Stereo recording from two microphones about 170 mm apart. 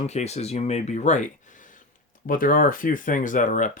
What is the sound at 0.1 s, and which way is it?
Speech, 40° left (ahead or behind).